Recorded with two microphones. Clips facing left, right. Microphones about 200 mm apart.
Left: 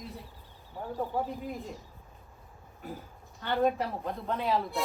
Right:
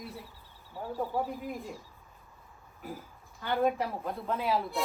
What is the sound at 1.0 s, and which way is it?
Speech, 15° left (ahead or behind).